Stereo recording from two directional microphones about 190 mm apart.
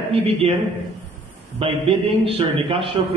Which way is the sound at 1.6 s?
30° right (ahead or behind).